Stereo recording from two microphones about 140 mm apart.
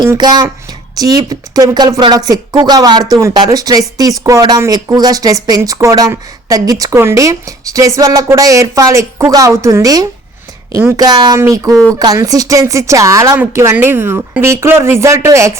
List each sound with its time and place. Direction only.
0.0 s speech: 30° right (ahead or behind)